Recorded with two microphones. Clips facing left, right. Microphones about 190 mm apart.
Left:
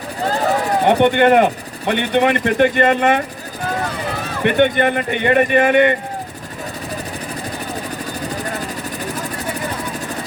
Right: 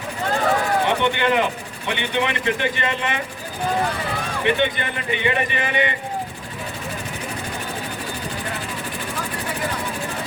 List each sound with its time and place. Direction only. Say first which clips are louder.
0.9 s a man's voice: left 8 dB; 50° left (ahead or behind)
4.4 s a man's voice: left 7 dB; 55° left (ahead or behind)